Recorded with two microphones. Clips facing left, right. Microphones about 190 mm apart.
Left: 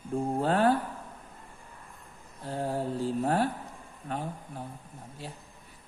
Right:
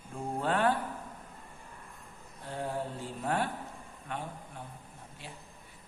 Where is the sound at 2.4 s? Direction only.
40° left (ahead or behind).